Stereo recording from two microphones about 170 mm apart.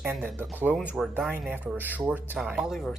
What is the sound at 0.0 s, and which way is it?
Speech, 5° right (ahead or behind).